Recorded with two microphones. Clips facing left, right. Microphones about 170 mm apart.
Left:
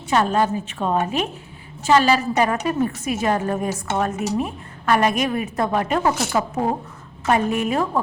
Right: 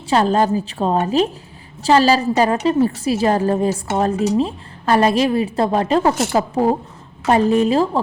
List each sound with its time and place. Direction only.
0.1 s a woman's voice: 35° right (ahead or behind)